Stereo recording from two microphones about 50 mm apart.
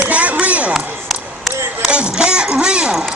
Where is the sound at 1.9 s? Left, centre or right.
Centre.